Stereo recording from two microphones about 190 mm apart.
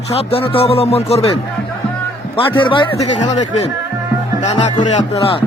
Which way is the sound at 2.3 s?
25° left (ahead or behind).